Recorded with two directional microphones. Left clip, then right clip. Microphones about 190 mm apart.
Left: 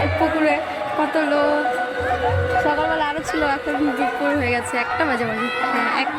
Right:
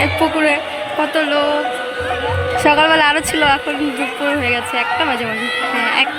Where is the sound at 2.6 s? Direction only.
55° right (ahead or behind).